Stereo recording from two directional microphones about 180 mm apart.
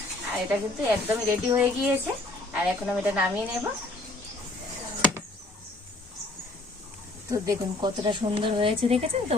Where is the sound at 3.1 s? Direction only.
10° right (ahead or behind).